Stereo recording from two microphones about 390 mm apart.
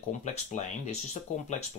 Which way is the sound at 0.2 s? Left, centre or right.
Centre.